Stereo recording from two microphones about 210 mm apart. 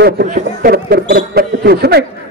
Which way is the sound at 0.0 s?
40° right (ahead or behind).